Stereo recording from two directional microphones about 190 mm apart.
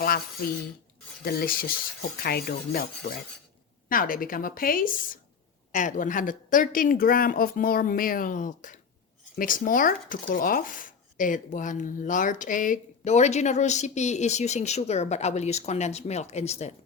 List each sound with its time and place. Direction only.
1.2 s speech: 55° left (ahead or behind); by 16.7 s 35° left (ahead or behind)